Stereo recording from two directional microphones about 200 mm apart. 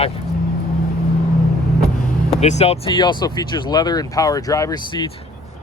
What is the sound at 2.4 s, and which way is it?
Speech, 35° left (ahead or behind).